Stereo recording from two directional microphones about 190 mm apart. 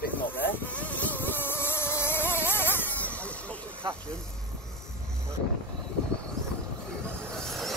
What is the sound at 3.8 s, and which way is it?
Speech, 25° right (ahead or behind).